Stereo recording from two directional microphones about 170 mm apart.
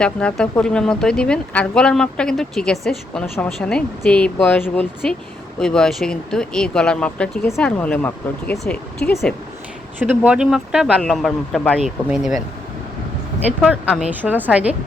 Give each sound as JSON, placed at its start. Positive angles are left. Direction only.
{"t": 0.0, "sound": "speech", "side_deg": 5}
{"t": 10.0, "sound": "speech", "side_deg": -10}
{"t": 14.0, "sound": "a woman's voice", "side_deg": -10}